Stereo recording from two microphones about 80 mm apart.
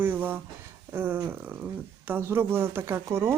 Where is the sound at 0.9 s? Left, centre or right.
Right.